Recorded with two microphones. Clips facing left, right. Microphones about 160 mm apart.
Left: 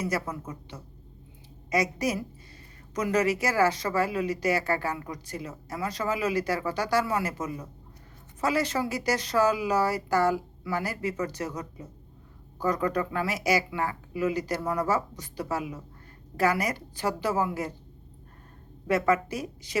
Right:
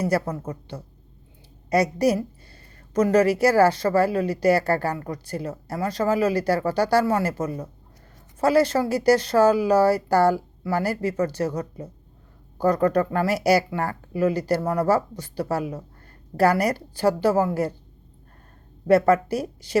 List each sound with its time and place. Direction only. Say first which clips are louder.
1.7 s speech: right 7 dB; 35° right (ahead or behind)
3.2 s speech: right 6 dB; 35° right (ahead or behind)
18.9 s speech: right 7 dB; 35° right (ahead or behind)